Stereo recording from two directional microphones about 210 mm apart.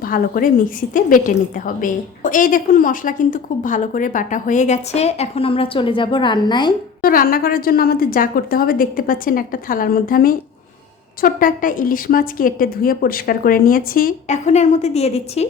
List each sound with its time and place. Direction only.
0.0 s a woman's voice: 45° left (ahead or behind); by 6.7 s 20° left (ahead or behind)
7.0 s a woman's voice: 45° left (ahead or behind)